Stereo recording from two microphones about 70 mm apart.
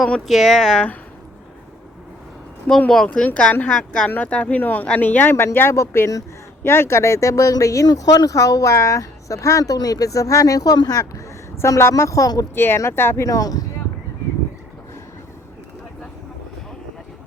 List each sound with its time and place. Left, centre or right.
0.3 s speech: centre
2.9 s speech: centre
3.2 s speech: left
7.9 s speech: left
11.6 s speech: left
12.5 s speech: left
13.2 s speech: left